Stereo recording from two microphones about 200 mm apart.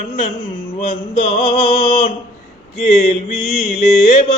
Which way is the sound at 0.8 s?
30° left (ahead or behind).